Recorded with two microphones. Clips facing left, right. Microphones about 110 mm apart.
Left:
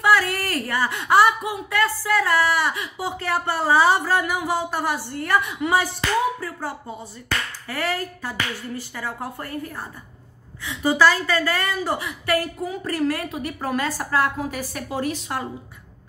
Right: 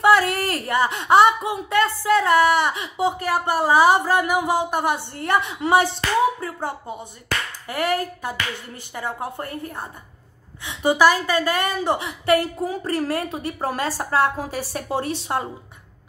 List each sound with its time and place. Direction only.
0.0 s speech: 25° right (ahead or behind)